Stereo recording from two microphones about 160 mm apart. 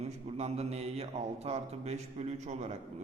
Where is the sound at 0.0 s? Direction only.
45° right (ahead or behind).